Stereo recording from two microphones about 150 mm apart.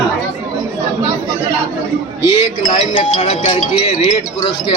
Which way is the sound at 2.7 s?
35° left (ahead or behind).